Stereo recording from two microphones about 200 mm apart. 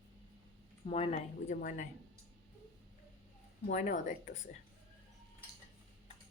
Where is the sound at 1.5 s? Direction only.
45° left (ahead or behind).